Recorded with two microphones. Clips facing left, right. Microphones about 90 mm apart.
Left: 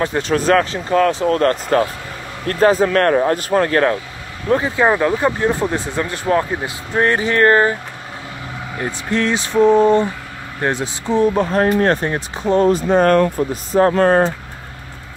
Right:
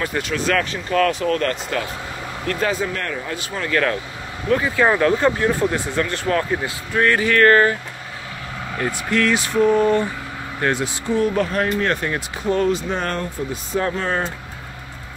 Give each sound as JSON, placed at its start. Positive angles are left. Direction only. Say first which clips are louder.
{"t": 0.0, "sound": "speech", "louder": "left 5 dB", "side_deg": 30}
{"t": 2.9, "sound": "speech", "louder": "left 12 dB", "side_deg": 55}
{"t": 4.5, "sound": "speech", "louder": "left 2 dB", "side_deg": 25}
{"t": 8.7, "sound": "speech", "louder": "even", "side_deg": 20}
{"t": 12.6, "sound": "speech", "louder": "left 8 dB", "side_deg": 45}